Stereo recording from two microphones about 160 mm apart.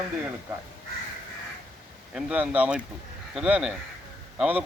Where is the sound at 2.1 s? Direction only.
10° right (ahead or behind).